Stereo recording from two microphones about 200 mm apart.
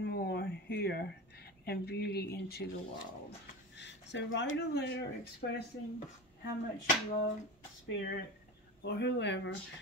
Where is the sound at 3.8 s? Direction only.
60° left (ahead or behind).